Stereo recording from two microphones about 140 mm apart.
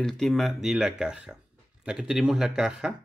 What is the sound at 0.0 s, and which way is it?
Speech, centre (ahead or behind).